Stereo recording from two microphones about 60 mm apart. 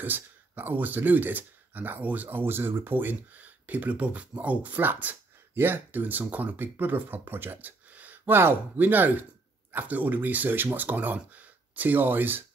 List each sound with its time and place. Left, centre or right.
0.0 s speech: right